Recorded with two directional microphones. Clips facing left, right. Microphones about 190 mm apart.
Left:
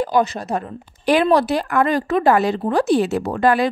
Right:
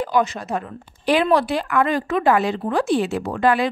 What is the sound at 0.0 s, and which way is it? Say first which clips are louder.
Speech: left 2 dB; 35° left (ahead or behind).